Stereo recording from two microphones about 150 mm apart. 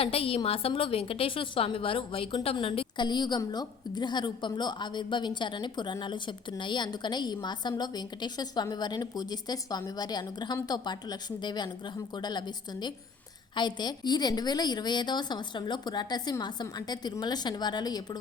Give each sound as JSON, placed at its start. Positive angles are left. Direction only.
{"t": 0.0, "sound": "a woman's voice", "side_deg": 40}